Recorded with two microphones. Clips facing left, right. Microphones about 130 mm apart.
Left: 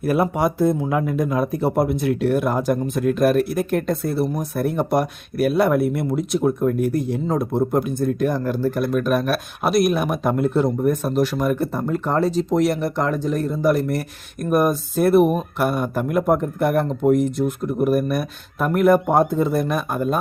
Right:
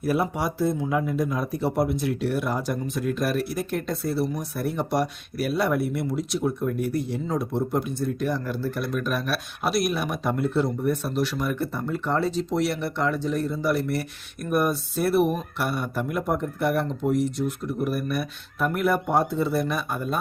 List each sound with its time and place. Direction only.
0.0 s speech: 55° left (ahead or behind)